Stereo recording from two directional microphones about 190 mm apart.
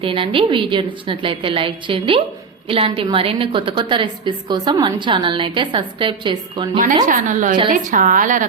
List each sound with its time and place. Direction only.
0.0 s a woman's voice: 25° right (ahead or behind)
7.0 s a woman's voice: 40° right (ahead or behind)